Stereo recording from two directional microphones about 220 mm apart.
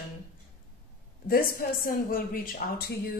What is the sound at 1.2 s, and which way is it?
Speech, 40° left (ahead or behind).